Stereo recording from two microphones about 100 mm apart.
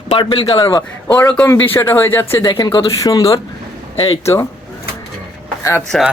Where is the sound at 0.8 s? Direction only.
35° left (ahead or behind).